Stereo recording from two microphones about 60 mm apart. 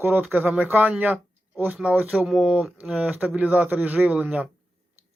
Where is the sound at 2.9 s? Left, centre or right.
Right.